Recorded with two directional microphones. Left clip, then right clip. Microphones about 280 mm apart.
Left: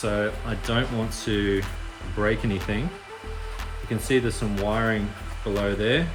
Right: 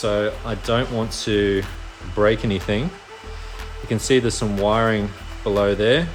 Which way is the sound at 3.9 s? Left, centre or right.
Centre.